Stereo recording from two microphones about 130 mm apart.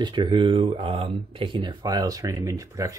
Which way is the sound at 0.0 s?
35° right (ahead or behind).